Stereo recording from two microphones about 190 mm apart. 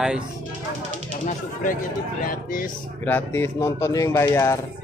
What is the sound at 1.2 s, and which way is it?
Speech, 45° left (ahead or behind).